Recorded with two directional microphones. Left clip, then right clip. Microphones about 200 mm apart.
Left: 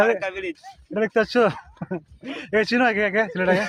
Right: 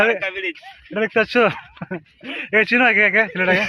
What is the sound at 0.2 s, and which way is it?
Speech, centre (ahead or behind).